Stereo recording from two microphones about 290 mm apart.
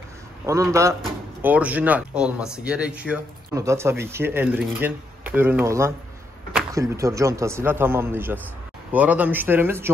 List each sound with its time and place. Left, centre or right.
0.5 s speech: centre